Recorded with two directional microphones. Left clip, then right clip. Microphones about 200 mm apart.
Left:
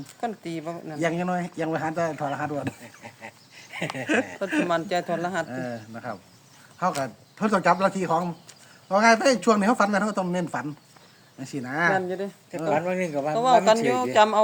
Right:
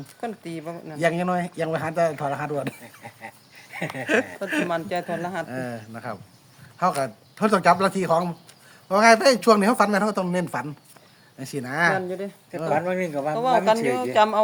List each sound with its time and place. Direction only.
0.2 s speech: 5° left (ahead or behind)
0.9 s speech: 45° right (ahead or behind)
2.8 s a sound: 5° left (ahead or behind)
4.0 s speech: 45° right (ahead or behind)
4.7 s speech: 15° left (ahead or behind)
5.5 s speech: 45° right (ahead or behind)
11.9 s speech: 5° left (ahead or behind)